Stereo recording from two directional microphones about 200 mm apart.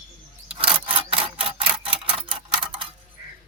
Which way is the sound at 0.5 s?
25° right (ahead or behind).